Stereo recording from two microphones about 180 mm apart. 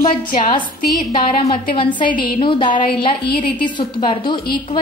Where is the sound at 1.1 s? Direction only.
30° left (ahead or behind).